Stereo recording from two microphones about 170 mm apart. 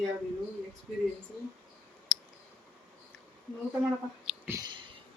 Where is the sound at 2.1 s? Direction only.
5° right (ahead or behind).